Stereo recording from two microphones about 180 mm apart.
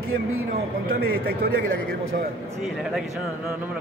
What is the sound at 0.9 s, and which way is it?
Speech, 60° right (ahead or behind).